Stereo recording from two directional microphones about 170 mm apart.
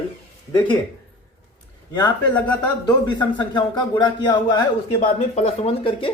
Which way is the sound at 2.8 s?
25° left (ahead or behind).